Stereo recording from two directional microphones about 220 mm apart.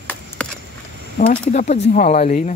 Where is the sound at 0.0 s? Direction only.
5° left (ahead or behind).